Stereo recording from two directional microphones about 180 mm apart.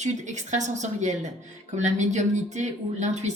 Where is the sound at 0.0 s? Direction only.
40° right (ahead or behind).